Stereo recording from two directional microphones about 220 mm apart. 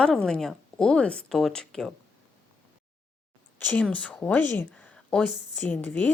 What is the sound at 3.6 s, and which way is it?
Speech, 5° left (ahead or behind).